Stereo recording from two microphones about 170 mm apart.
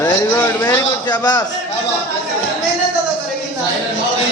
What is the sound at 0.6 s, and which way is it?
Speech, 25° left (ahead or behind).